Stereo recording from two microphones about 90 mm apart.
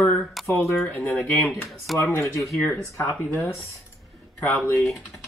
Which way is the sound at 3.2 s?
25° left (ahead or behind).